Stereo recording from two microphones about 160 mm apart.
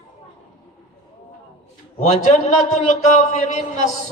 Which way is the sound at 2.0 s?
40° left (ahead or behind).